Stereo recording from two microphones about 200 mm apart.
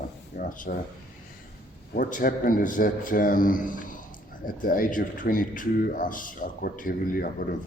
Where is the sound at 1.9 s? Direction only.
45° left (ahead or behind).